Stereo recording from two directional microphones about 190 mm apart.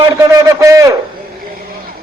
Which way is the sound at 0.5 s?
15° right (ahead or behind).